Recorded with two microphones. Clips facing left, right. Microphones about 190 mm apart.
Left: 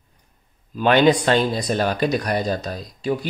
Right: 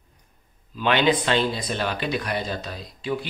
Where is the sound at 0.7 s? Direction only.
45° left (ahead or behind).